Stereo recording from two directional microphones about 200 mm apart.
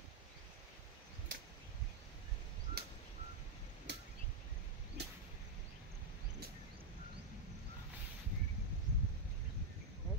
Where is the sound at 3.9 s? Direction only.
60° right (ahead or behind).